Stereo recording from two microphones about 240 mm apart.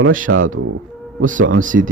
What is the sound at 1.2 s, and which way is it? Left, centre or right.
Speech, right.